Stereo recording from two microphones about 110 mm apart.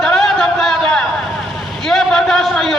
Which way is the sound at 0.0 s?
5° left (ahead or behind).